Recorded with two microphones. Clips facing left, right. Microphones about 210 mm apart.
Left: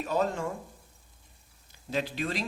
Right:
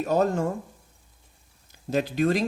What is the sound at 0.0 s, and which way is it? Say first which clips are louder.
Speech: right 6 dB; 45° right (ahead or behind).